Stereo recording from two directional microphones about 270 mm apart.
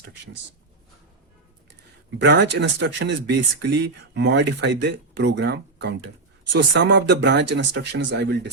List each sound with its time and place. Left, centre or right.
2.0 s speech: right